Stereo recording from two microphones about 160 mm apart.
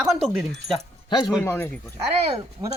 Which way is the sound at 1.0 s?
25° left (ahead or behind).